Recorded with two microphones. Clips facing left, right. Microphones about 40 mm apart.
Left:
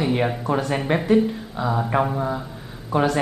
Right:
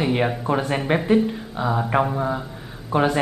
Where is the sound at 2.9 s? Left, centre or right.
Centre.